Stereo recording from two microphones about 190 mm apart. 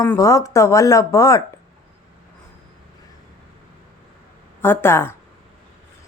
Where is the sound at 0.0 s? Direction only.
15° left (ahead or behind).